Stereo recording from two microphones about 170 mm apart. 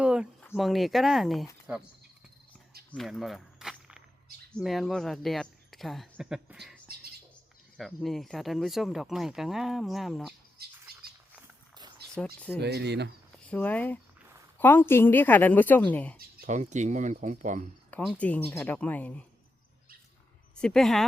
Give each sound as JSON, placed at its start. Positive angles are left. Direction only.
{"t": 0.0, "sound": "a sound", "side_deg": -5}
{"t": 0.5, "sound": "speech", "side_deg": 0}
{"t": 2.9, "sound": "walk", "side_deg": 0}
{"t": 4.5, "sound": "speech", "side_deg": 0}
{"t": 7.8, "sound": "speech", "side_deg": 0}
{"t": 10.6, "sound": "bird", "side_deg": -70}
{"t": 11.7, "sound": "a sound", "side_deg": -25}
{"t": 12.1, "sound": "a woman's voice", "side_deg": 5}
{"t": 12.5, "sound": "speech", "side_deg": -75}
{"t": 13.5, "sound": "a woman's voice", "side_deg": 10}
{"t": 16.5, "sound": "speech", "side_deg": -45}
{"t": 17.9, "sound": "a woman's voice", "side_deg": 5}
{"t": 20.6, "sound": "speech", "side_deg": 5}